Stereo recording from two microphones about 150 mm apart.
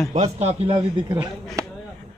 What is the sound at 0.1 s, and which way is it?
Speech, 45° right (ahead or behind).